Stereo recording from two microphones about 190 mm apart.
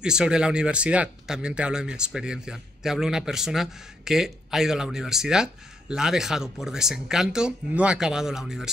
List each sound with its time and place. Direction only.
0.0 s speech: 5° right (ahead or behind)